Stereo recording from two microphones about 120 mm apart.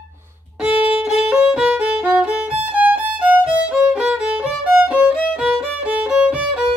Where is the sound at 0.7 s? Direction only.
50° left (ahead or behind).